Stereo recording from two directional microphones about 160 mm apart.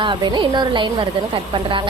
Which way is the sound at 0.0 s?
30° right (ahead or behind).